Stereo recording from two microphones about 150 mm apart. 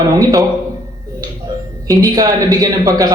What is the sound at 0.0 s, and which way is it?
Speech, 25° right (ahead or behind).